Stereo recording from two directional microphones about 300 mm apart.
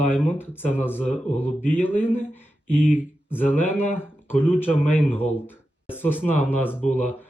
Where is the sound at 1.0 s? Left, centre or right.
Left.